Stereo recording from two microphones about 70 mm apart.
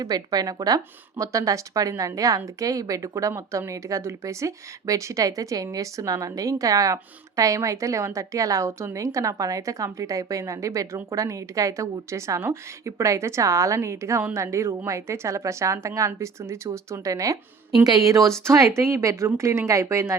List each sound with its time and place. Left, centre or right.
0.0 s a woman's voice: right